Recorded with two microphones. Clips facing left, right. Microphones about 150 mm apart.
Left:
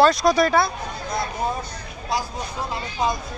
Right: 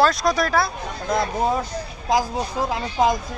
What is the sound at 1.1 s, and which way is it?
A woman's voice, 90° right.